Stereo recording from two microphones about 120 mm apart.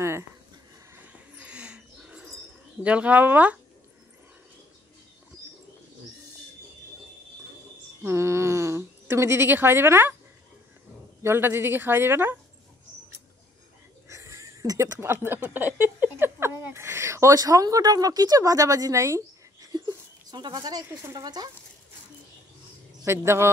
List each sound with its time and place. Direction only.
0.9 s a sound: 10° right (ahead or behind)
2.8 s speech: 10° right (ahead or behind)
8.0 s speech: 20° right (ahead or behind)
11.2 s a woman's voice: 20° right (ahead or behind)
14.0 s speech: 25° right (ahead or behind)
23.0 s a woman's voice: 20° right (ahead or behind)